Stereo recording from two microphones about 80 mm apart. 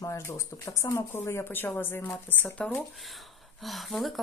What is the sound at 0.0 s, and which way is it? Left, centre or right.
Speech, left.